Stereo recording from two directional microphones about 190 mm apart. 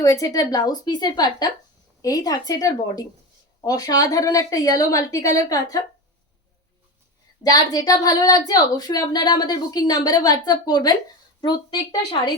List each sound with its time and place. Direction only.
0.0 s a woman's voice: 20° left (ahead or behind)
7.4 s a woman's voice: 20° left (ahead or behind)